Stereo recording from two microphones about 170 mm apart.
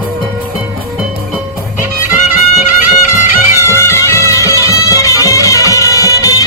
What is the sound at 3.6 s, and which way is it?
Music, 15° left (ahead or behind).